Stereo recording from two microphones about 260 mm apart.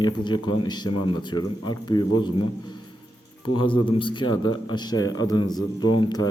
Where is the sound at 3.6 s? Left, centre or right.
Centre.